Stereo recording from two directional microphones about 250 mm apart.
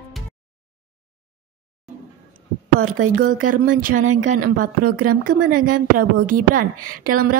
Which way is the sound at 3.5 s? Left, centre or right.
Right.